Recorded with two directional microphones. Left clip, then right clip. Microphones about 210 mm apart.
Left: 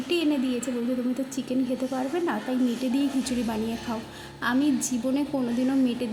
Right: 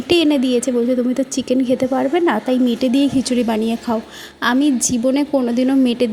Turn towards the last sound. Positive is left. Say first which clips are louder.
# right 9 dB
turn(degrees=-40)  # may be behind; listen again after turning